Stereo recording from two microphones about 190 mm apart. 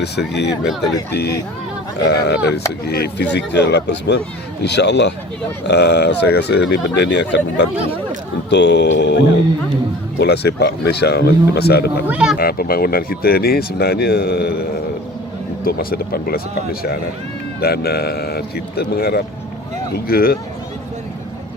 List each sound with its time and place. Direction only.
0.0 s speech: 60° left (ahead or behind)
2.0 s speech: 60° left (ahead or behind)
12.0 s speech: 5° right (ahead or behind)
12.4 s speech: 50° left (ahead or behind)
15.6 s speech: 50° left (ahead or behind)
17.6 s speech: 55° left (ahead or behind)